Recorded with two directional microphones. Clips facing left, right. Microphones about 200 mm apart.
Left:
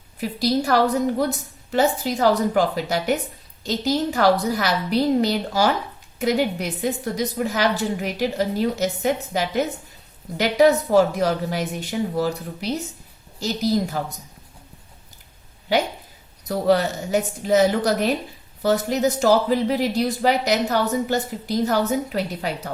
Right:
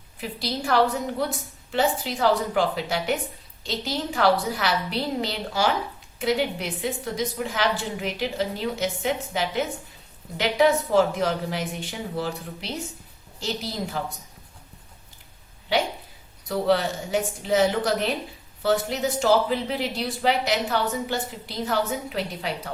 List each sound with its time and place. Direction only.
0.2 s speech: 40° left (ahead or behind)
16.5 s speech: 40° left (ahead or behind)